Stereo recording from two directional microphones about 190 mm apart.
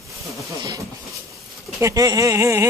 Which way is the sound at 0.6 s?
20° right (ahead or behind).